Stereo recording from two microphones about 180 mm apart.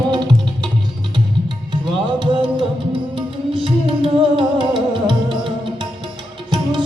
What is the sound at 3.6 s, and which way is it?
Music, 30° right (ahead or behind).